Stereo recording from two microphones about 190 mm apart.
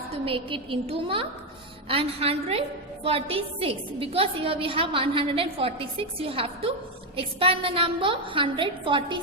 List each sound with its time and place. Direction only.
0.1 s a woman's voice: 30° right (ahead or behind)